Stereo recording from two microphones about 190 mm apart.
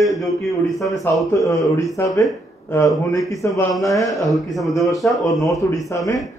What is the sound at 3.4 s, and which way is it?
Speech, 15° left (ahead or behind).